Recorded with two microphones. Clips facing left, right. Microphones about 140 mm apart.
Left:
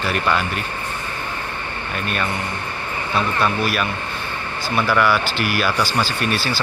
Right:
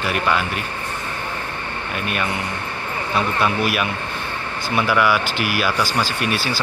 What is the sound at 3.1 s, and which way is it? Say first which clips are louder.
A man's voice: even; 10° right (ahead or behind).